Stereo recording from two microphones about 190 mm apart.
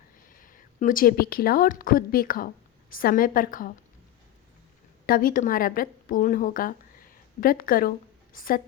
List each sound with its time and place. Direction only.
0.3 s a woman's voice: 45° left (ahead or behind)
5.0 s a woman's voice: 50° left (ahead or behind)